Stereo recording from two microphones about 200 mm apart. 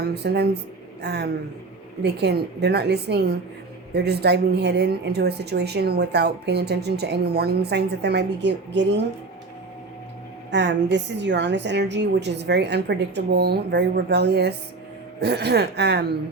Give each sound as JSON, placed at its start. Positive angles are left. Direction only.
{"t": 0.0, "sound": "speech", "side_deg": -55}
{"t": 10.5, "sound": "speech", "side_deg": -60}